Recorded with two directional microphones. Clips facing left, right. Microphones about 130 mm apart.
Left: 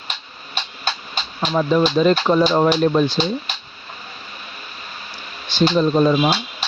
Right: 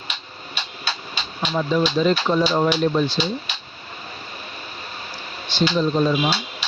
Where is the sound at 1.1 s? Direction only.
50° left (ahead or behind).